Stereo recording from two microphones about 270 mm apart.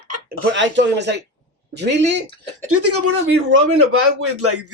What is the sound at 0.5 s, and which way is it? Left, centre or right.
Speech, right.